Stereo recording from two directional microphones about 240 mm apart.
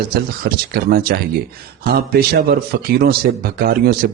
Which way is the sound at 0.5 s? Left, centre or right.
Right.